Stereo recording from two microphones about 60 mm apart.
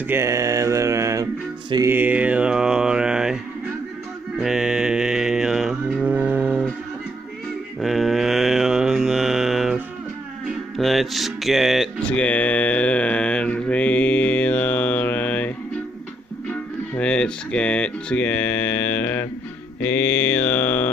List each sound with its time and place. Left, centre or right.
0.2 s mantra: right
1.9 s mantra: right; by 3.3 s centre
4.4 s music: centre
6.0 s a sound: right
7.8 s mantra: centre
10.8 s speech: centre
12.2 s mantra: left
17.0 s mantra: centre